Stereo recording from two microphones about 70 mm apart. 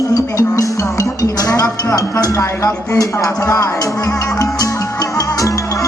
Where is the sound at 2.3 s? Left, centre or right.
Left.